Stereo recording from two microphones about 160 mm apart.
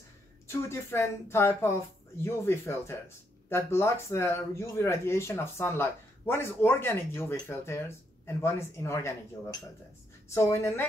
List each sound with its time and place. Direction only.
0.5 s speech: 15° left (ahead or behind)